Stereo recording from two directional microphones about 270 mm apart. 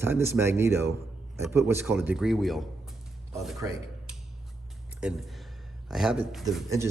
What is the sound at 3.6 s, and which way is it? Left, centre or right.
Speech, centre.